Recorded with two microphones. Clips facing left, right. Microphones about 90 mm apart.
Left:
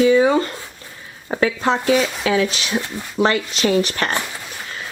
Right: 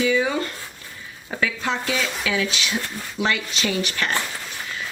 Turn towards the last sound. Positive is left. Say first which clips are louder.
# left 6 dB
turn(degrees=40)  # may be behind; listen again after turning